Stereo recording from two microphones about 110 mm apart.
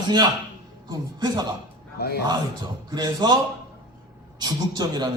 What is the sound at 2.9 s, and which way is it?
Speech, 40° right (ahead or behind).